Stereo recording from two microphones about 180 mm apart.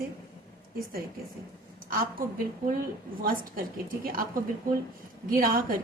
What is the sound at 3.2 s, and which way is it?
Speech, 50° right (ahead or behind).